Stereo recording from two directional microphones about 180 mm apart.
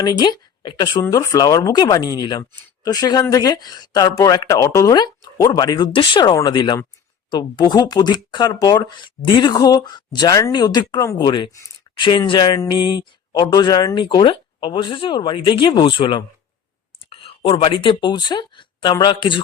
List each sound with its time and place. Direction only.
0.0 s speech: 20° left (ahead or behind)